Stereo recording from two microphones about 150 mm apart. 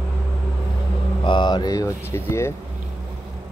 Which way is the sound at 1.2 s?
30° left (ahead or behind).